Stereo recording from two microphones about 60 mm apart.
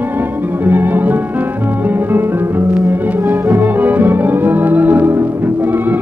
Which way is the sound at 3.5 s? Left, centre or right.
Right.